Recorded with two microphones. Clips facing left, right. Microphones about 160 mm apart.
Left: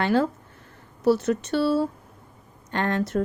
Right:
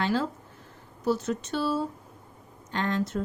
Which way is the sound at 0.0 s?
60° left (ahead or behind).